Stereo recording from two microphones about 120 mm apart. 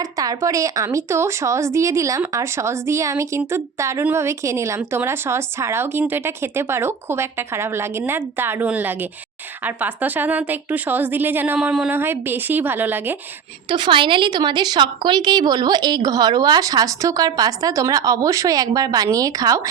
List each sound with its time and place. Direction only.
0.0 s a woman's voice: 30° right (ahead or behind); by 11.9 s 10° right (ahead or behind)
11.9 s a woman's voice: 20° right (ahead or behind)
13.7 s speech: 40° right (ahead or behind)